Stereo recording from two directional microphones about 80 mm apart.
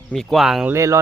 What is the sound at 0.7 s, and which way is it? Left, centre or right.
Speech, right.